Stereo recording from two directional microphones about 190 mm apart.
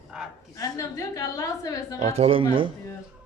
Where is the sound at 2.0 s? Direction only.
30° right (ahead or behind).